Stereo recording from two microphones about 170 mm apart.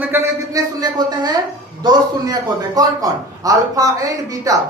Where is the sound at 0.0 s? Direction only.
15° right (ahead or behind).